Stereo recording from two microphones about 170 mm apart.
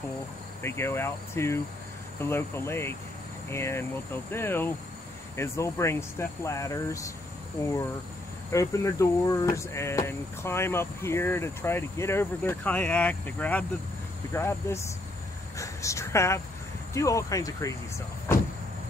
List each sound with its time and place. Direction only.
0.6 s speech: 15° left (ahead or behind)
8.5 s a woman's voice: 20° left (ahead or behind)